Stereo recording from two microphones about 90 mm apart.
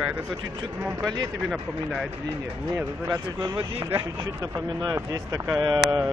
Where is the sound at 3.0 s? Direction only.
45° right (ahead or behind).